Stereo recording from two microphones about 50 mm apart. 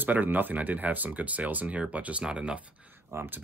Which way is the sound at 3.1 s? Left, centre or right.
Right.